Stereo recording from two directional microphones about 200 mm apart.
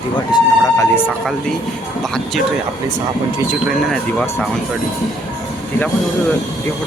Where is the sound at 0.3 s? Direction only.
15° left (ahead or behind).